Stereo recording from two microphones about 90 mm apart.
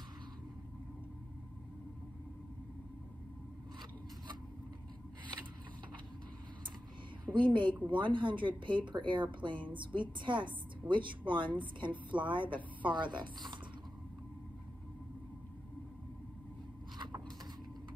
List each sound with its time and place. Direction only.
7.2 s a woman's voice: 65° right (ahead or behind)